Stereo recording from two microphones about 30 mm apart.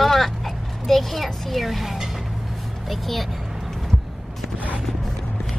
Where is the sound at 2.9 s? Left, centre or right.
Centre.